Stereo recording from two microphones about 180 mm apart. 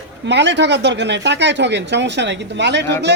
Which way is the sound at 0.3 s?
75° right (ahead or behind).